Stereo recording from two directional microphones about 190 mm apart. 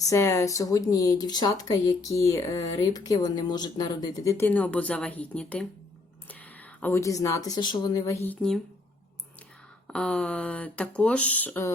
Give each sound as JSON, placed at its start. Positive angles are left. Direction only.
{"t": 0.0, "sound": "speech", "side_deg": 15}
{"t": 6.7, "sound": "speech", "side_deg": 10}
{"t": 9.8, "sound": "speech", "side_deg": 5}